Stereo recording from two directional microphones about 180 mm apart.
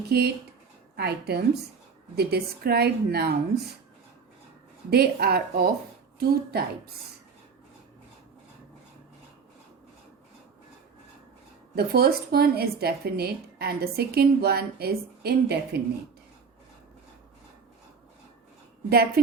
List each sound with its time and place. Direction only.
0.1 s speech: 60° right (ahead or behind)
4.9 s speech: 60° right (ahead or behind)
11.7 s speech: 60° right (ahead or behind)
18.9 s speech: 60° right (ahead or behind)